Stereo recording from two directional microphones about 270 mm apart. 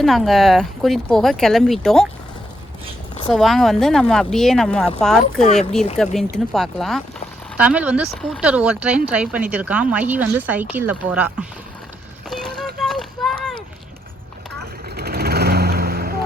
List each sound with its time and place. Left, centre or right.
0.0 s speech: centre
3.3 s speech: centre
12.3 s a sound: centre
14.6 s vehicle: right